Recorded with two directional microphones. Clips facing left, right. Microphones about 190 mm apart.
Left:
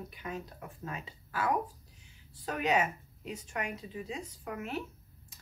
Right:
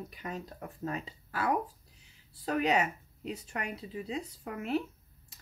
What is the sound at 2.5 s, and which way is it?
Speech, 35° right (ahead or behind).